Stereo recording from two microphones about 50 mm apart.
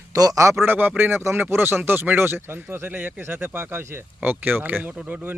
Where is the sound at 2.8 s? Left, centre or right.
Right.